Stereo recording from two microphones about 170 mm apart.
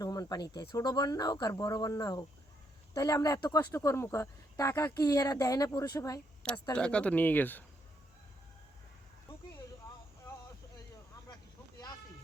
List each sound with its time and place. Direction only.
0.0 s a sound: 20° left (ahead or behind)
0.7 s speech: 25° left (ahead or behind)
6.7 s speech: 5° left (ahead or behind)